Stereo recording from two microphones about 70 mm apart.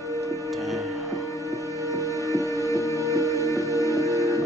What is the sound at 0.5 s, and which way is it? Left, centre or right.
Music, centre.